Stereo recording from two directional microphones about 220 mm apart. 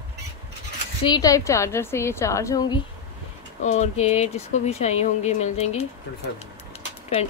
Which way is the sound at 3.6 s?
30° left (ahead or behind).